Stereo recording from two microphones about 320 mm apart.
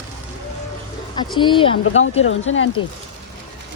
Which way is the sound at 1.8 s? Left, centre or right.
Left.